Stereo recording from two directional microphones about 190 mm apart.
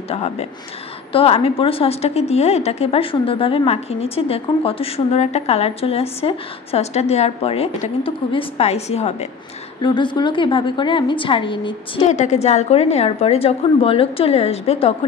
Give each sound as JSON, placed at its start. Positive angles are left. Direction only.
{"t": 0.1, "sound": "a woman's voice", "side_deg": 35}
{"t": 12.0, "sound": "a woman's voice", "side_deg": 40}